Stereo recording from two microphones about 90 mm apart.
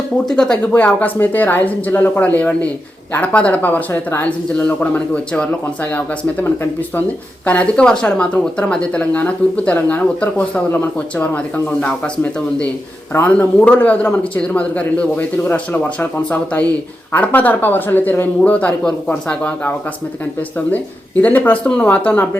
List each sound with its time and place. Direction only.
0.3 s speech: 10° left (ahead or behind)